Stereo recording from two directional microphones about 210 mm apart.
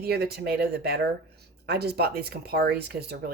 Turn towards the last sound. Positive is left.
turn(degrees=-50)  # may be behind; listen again after turning